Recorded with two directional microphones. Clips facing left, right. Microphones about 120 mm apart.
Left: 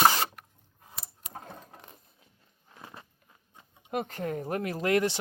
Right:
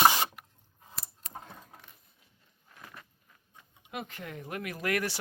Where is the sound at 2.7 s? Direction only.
30° left (ahead or behind).